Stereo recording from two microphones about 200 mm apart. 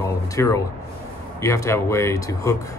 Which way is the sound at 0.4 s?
15° left (ahead or behind).